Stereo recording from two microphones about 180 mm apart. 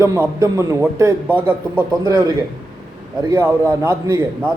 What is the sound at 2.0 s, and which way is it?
A man's voice, 20° right (ahead or behind).